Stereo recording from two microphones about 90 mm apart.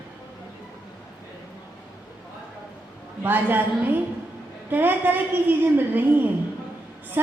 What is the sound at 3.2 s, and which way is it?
A woman's voice, 20° right (ahead or behind).